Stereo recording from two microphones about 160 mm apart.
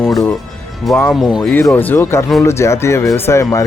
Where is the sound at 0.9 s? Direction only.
5° left (ahead or behind).